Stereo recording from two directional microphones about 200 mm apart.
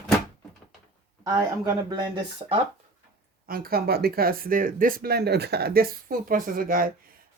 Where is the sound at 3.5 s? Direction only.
50° right (ahead or behind).